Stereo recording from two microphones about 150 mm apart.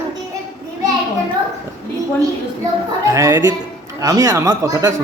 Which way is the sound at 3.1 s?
20° right (ahead or behind).